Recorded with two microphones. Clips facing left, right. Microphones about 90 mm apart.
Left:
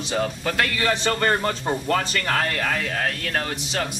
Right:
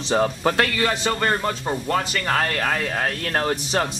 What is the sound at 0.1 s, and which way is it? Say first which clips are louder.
Speech: right 5 dB; 35° right (ahead or behind).